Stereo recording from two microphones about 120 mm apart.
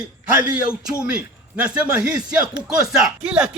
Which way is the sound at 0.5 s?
10° right (ahead or behind).